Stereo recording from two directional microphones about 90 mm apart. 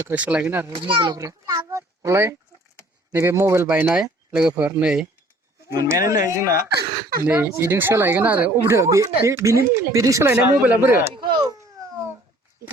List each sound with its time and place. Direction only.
0.1 s speech: 15° right (ahead or behind)
0.7 s a child's voice: 70° right (ahead or behind)
1.1 s speech: 40° right (ahead or behind)
3.7 s speech: 20° right (ahead or behind)
3.9 s speech: 5° right (ahead or behind)
4.5 s speech: 25° right (ahead or behind)
4.8 s speech: 10° right (ahead or behind)
5.8 s speech: 35° right (ahead or behind); by 8.7 s 20° right (ahead or behind)
8.7 s speech: 35° right (ahead or behind)
10.2 s speech: 20° right (ahead or behind)
11.2 s speech: 60° right (ahead or behind)